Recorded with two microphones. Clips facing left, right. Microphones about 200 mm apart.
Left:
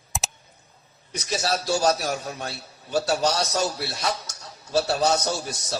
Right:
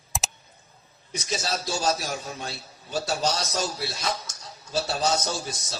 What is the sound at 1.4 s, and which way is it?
A man's voice, 65° left (ahead or behind).